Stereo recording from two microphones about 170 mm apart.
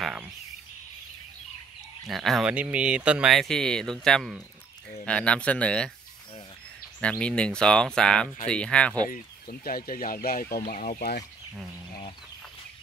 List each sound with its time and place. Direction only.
0.0 s a sound: 5° right (ahead or behind)
2.0 s speech: centre (ahead or behind)
7.0 s speech: 5° left (ahead or behind)
9.1 s speech: 55° left (ahead or behind)